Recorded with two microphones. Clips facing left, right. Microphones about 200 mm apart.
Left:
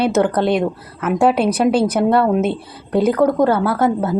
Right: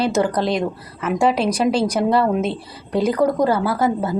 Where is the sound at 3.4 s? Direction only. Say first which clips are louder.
Left 3 dB; 55° left (ahead or behind).